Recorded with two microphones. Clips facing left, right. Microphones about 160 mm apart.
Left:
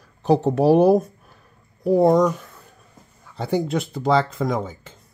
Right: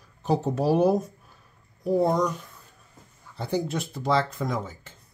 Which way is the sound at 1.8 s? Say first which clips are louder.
Left 7 dB; 75° left (ahead or behind).